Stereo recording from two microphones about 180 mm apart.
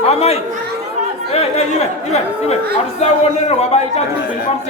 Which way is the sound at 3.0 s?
35° left (ahead or behind).